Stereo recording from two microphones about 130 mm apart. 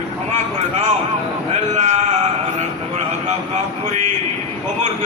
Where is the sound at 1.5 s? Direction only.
60° right (ahead or behind).